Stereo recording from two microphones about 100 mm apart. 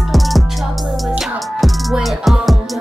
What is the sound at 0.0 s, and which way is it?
Music, centre (ahead or behind).